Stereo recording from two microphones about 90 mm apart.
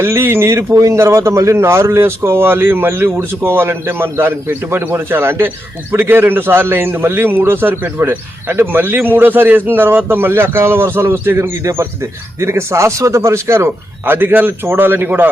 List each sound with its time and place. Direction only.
0.0 s a man's voice: 25° right (ahead or behind)